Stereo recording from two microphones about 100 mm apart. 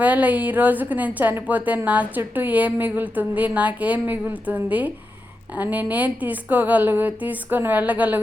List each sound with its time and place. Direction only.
0.0 s a woman's voice: 15° right (ahead or behind)